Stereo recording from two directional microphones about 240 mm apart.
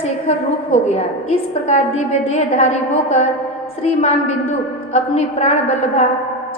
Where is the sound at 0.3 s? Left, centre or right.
Left.